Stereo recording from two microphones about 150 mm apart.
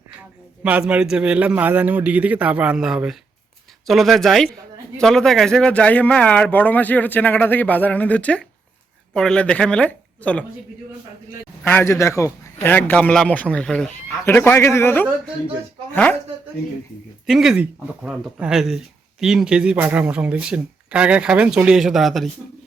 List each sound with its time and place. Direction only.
0.6 s speech: 10° right (ahead or behind); by 10.4 s 10° left (ahead or behind)
11.6 s speech: 15° left (ahead or behind)
14.3 s speech: 15° left (ahead or behind)
17.2 s speech: centre (ahead or behind)